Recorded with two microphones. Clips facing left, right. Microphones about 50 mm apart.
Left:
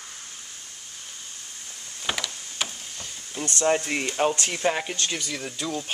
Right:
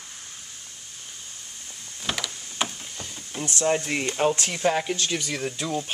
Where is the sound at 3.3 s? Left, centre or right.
Centre.